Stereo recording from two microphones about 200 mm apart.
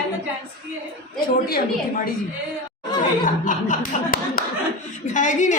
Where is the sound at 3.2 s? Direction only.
40° left (ahead or behind).